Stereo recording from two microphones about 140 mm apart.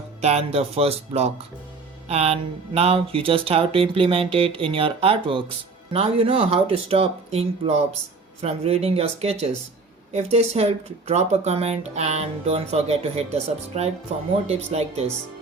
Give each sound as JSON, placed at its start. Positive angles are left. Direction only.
{"t": 0.2, "sound": "speech", "side_deg": -50}